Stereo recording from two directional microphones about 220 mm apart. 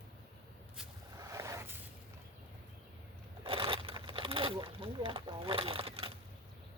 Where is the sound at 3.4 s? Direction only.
25° right (ahead or behind).